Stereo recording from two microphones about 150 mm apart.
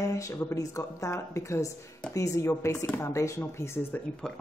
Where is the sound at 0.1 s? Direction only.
20° left (ahead or behind).